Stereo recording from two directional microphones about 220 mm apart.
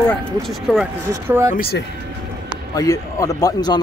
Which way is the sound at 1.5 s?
45° left (ahead or behind).